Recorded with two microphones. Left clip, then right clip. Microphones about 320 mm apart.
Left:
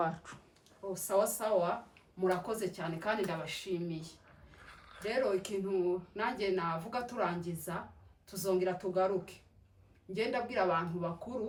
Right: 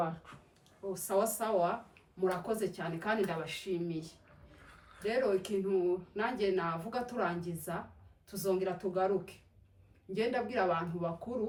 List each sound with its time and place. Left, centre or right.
0.3 s a sound: left
0.9 s speech: centre
5.0 s speech: centre